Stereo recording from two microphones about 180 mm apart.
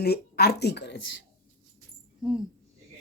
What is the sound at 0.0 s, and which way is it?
Speech, 65° left (ahead or behind).